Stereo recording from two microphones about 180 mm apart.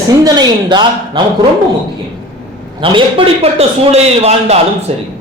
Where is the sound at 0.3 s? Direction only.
25° right (ahead or behind).